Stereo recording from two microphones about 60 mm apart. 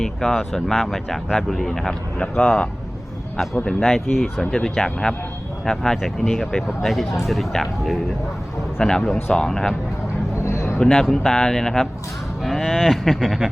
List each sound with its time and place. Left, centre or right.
0.0 s speech: centre
10.3 s a sound: left
10.8 s a man's voice: centre